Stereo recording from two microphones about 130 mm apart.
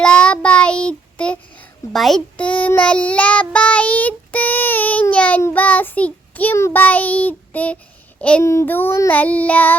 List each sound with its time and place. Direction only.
0.0 s child singing: 5° left (ahead or behind)
1.9 s speech: centre (ahead or behind)